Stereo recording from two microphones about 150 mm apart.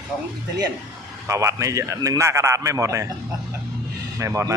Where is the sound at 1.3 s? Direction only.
20° right (ahead or behind).